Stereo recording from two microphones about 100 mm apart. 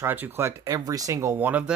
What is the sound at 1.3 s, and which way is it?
Speech, 15° right (ahead or behind).